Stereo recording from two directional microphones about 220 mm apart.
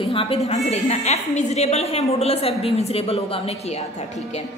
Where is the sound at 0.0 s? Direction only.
25° left (ahead or behind).